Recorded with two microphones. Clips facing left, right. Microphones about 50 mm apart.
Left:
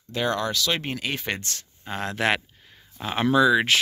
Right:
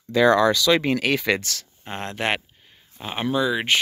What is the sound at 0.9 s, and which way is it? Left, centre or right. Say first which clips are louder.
Speech: right 7 dB; right.